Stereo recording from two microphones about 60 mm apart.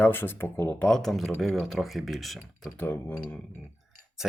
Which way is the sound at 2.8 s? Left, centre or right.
Left.